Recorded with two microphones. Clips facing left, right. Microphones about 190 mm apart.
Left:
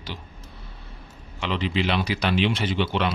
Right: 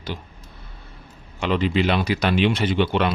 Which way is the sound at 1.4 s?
45° right (ahead or behind).